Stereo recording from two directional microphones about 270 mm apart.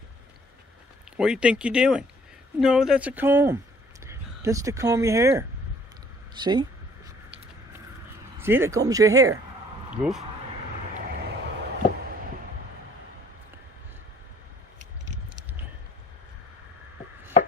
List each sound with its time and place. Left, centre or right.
1.1 s speech: centre
6.3 s a sound: centre
8.4 s speech: centre